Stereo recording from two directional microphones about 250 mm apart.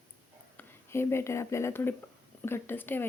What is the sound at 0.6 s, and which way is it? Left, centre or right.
Speech, centre.